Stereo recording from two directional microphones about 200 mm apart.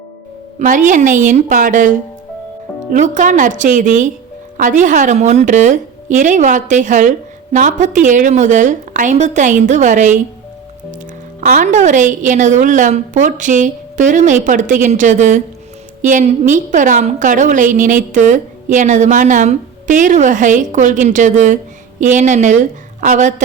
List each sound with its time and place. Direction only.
0.6 s a woman's voice: 40° right (ahead or behind)
2.9 s a woman's voice: 40° right (ahead or behind)
11.3 s a woman's voice: 40° right (ahead or behind)